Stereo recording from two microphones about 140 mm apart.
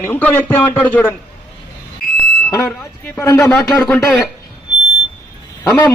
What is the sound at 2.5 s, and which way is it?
Speech, 20° left (ahead or behind).